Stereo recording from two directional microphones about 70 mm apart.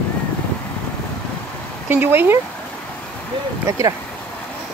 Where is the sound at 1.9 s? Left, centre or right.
Right.